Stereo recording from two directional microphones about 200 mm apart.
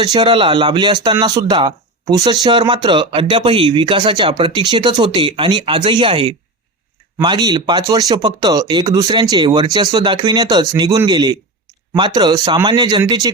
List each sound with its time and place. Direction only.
0.0 s speech: 20° right (ahead or behind)